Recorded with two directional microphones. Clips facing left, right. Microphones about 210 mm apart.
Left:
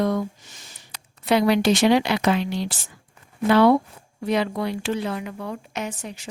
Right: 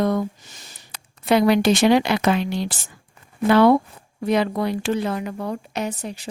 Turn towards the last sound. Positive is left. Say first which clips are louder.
# right 4 dB
turn(degrees=-35)  # may be behind; listen again after turning